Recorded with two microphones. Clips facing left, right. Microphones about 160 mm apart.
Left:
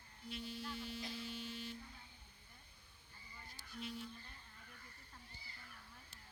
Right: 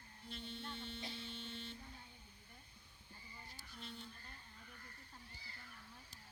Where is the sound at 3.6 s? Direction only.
30° right (ahead or behind).